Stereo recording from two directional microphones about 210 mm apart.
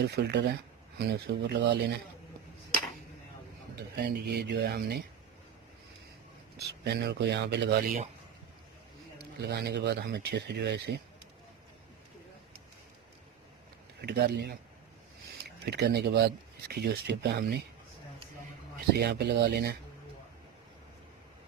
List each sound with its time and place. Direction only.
0.0 s speech: 50° right (ahead or behind)
3.9 s speech: 50° right (ahead or behind)
6.6 s speech: 50° right (ahead or behind)
9.1 s speech: 50° right (ahead or behind)
14.0 s speech: 50° right (ahead or behind)
15.6 s speech: 50° right (ahead or behind)
18.9 s speech: 50° right (ahead or behind)